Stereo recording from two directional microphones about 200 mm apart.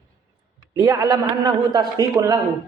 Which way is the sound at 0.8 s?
15° right (ahead or behind).